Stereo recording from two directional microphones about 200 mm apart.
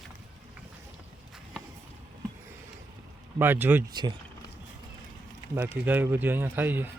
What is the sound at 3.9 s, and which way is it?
Speech, 20° right (ahead or behind).